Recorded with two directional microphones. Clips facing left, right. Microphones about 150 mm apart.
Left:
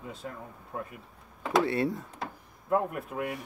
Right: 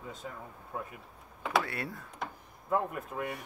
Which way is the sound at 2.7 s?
5° left (ahead or behind).